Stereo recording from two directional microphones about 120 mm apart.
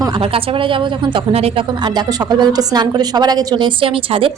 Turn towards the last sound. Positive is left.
turn(degrees=-45)  # may be behind; listen again after turning